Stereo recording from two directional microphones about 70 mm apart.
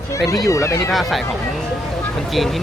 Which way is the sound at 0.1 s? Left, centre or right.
Left.